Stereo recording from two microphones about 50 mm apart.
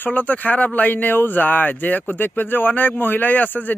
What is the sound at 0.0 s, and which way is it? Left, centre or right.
Speech, left.